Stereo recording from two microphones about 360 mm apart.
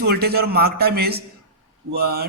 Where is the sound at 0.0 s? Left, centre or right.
Right.